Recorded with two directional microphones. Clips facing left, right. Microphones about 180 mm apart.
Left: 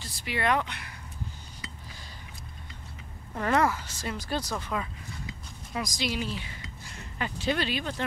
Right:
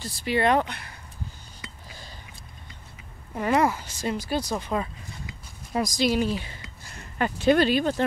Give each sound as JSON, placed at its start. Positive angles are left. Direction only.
{"t": 0.0, "sound": "speech", "side_deg": -35}
{"t": 3.3, "sound": "speech", "side_deg": -10}
{"t": 5.7, "sound": "speech", "side_deg": -35}
{"t": 7.2, "sound": "speech", "side_deg": -55}